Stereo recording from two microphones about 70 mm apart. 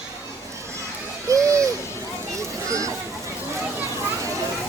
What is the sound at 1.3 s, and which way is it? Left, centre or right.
Hoot, right.